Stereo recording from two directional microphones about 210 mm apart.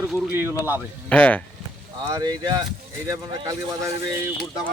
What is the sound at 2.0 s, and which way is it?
Speech, 20° right (ahead or behind).